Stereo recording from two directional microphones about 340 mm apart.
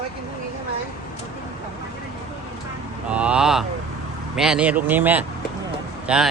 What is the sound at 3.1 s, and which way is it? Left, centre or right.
A man's voice, centre.